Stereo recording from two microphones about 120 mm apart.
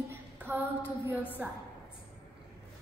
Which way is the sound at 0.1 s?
15° right (ahead or behind).